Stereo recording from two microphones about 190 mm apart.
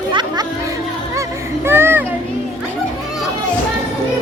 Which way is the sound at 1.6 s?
10° right (ahead or behind).